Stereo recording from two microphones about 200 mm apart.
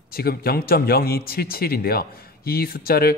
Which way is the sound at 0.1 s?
50° left (ahead or behind).